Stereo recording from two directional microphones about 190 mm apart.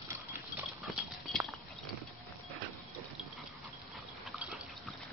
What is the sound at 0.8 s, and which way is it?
Clip-clop, centre (ahead or behind).